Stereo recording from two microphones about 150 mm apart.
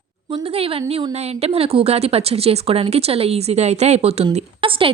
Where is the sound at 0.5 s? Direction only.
40° right (ahead or behind).